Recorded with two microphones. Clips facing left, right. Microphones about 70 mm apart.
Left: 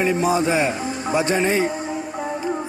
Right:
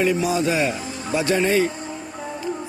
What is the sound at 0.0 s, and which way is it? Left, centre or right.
Speech, left.